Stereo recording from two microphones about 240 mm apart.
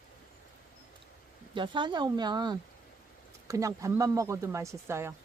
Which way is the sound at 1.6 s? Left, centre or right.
Centre.